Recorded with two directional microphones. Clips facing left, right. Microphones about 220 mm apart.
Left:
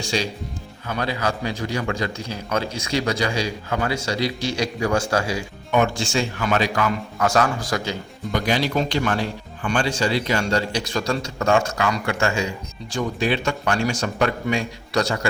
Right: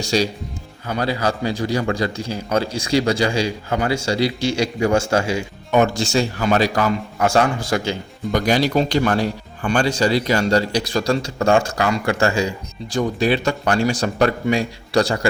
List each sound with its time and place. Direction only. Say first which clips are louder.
0.0 s a man's voice: right 5 dB; 40° right (ahead or behind)
5.7 s a man's voice: right 4 dB; 40° right (ahead or behind)
8.3 s a man's voice: right 4 dB; 40° right (ahead or behind)